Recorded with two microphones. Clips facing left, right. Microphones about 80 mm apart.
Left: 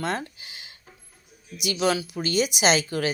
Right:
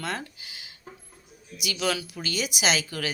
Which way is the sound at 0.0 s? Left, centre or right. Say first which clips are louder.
Left 4 dB; left.